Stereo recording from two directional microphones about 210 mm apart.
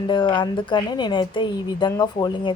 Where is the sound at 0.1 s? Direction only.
25° left (ahead or behind).